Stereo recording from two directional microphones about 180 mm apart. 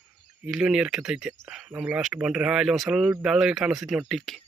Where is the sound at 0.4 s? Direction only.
5° right (ahead or behind).